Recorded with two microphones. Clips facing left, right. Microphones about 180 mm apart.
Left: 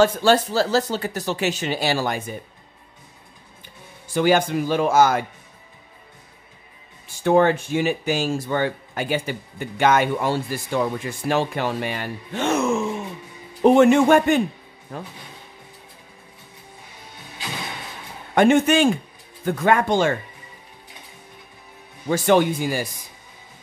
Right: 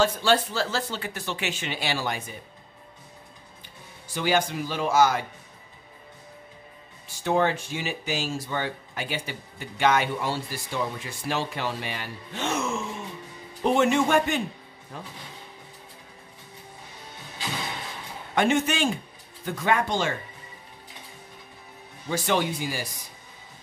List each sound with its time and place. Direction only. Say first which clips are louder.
0.0 s speech: left 6 dB; 45° left (ahead or behind)
4.1 s speech: left 7 dB; 50° left (ahead or behind)
7.2 s speech: left 7 dB; 55° left (ahead or behind)
18.3 s speech: left 8 dB; 50° left (ahead or behind)
22.1 s speech: left 8 dB; 50° left (ahead or behind)